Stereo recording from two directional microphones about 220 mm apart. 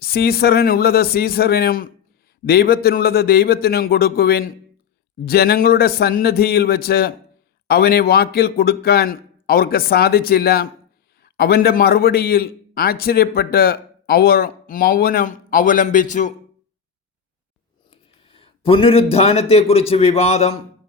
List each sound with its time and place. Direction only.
0.0 s a man's voice: 45° left (ahead or behind)
17.9 s a sound: 25° left (ahead or behind)
19.1 s a man's voice: 25° left (ahead or behind)